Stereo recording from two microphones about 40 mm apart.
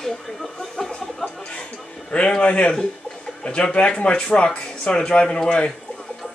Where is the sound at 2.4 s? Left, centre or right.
Left.